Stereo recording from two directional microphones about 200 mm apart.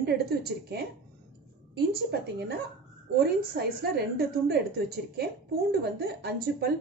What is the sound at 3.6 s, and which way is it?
A woman's voice, 50° right (ahead or behind).